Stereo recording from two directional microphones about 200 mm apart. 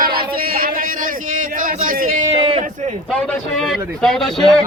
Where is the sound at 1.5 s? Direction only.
45° right (ahead or behind).